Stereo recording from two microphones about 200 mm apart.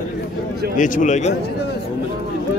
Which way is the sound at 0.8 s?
40° left (ahead or behind).